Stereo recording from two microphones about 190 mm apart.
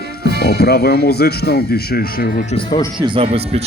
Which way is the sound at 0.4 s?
55° left (ahead or behind).